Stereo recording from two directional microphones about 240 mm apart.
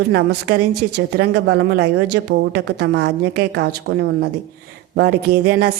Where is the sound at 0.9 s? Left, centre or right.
Right.